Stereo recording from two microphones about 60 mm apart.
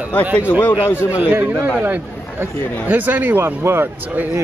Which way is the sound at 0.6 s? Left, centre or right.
Left.